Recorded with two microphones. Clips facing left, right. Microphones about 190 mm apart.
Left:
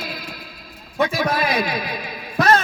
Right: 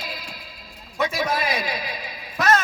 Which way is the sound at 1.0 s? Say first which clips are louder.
Left 3 dB; 60° left (ahead or behind).